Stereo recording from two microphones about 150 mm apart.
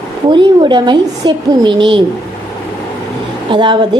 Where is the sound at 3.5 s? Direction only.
30° right (ahead or behind).